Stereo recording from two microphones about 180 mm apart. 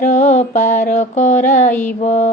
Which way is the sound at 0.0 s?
40° left (ahead or behind).